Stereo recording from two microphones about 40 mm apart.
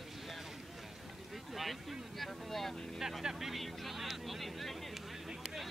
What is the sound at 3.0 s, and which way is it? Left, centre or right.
Vehicle, centre.